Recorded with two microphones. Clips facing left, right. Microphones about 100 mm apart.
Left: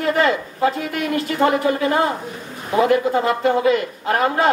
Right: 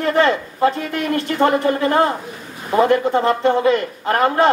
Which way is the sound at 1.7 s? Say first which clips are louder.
Right 2 dB; 40° right (ahead or behind).